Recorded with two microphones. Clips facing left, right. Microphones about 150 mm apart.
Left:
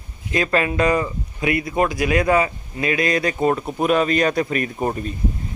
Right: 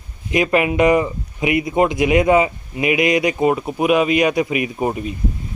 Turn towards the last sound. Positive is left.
turn(degrees=-10)  # may be behind; listen again after turning